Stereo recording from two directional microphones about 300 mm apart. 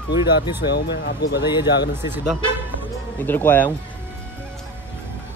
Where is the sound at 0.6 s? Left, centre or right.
Left.